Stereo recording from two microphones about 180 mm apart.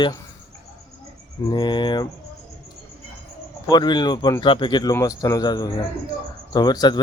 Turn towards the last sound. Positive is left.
turn(degrees=25)  # may be behind; listen again after turning